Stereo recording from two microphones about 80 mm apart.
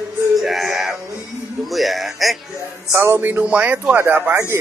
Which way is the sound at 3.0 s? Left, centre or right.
Right.